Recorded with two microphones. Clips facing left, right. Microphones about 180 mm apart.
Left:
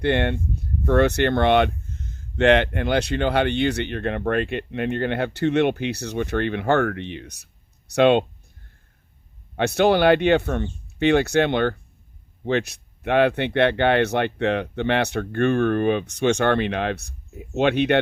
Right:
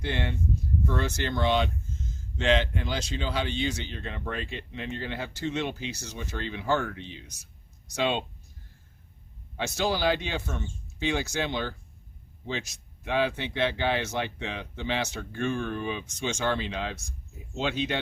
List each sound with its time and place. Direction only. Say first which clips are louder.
0.0 s speech: left 10 dB; 60° left (ahead or behind)
9.6 s speech: left 10 dB; 65° left (ahead or behind)